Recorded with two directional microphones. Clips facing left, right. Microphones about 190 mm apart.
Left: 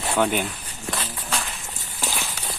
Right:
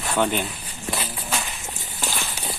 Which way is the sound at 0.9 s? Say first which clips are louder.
Right 1 dB; 10° right (ahead or behind).